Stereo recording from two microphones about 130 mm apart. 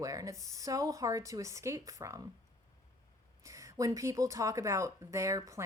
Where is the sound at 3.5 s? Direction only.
25° right (ahead or behind).